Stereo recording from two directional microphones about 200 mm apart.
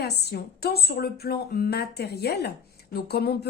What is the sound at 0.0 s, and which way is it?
A woman's voice, 55° left (ahead or behind).